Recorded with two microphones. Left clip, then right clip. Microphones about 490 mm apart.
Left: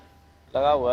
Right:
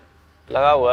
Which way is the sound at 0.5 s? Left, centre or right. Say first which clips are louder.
Right 6 dB; right.